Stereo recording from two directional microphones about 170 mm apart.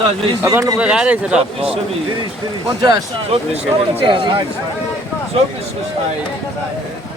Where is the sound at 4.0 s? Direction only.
30° right (ahead or behind).